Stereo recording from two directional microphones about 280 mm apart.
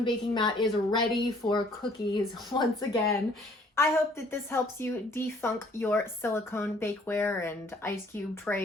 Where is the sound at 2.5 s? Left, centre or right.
Centre.